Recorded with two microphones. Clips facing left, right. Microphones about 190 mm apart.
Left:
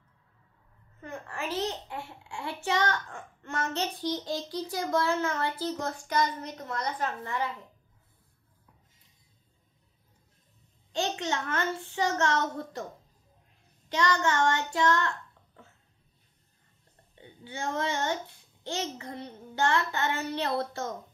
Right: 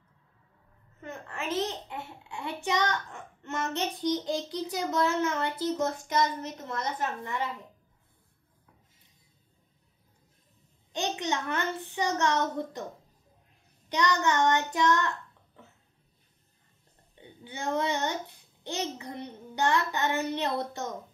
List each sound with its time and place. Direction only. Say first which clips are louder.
1.0 s a child's voice: even; 20° right (ahead or behind)
10.9 s a child's voice: even; 15° right (ahead or behind)
13.8 s a child's voice: even; 20° right (ahead or behind)
17.5 s a child's voice: right 2 dB; 20° right (ahead or behind)